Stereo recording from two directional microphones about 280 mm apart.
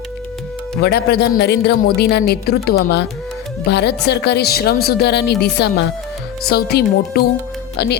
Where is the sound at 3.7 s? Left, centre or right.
Left.